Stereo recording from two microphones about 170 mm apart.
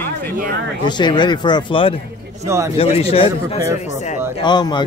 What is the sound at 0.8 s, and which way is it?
A man's voice, 25° left (ahead or behind).